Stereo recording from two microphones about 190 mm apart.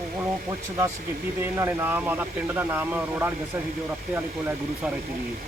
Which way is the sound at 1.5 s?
10° right (ahead or behind).